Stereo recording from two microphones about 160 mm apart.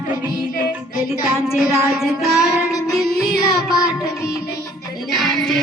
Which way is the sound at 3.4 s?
20° left (ahead or behind).